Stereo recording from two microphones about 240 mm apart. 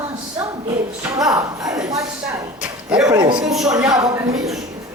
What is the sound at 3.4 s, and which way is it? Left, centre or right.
Speech, centre.